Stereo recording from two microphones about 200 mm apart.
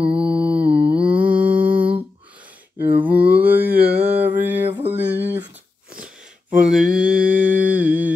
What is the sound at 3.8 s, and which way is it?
Mantra, 50° right (ahead or behind).